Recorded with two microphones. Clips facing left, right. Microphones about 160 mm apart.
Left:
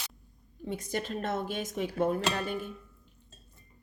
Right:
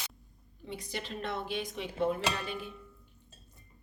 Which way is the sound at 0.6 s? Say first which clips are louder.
Left 6 dB; 45° left (ahead or behind).